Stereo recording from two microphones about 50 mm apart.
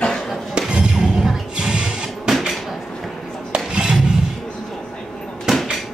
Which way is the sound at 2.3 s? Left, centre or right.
Centre.